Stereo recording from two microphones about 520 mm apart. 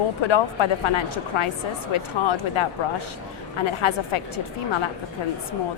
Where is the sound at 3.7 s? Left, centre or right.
Left.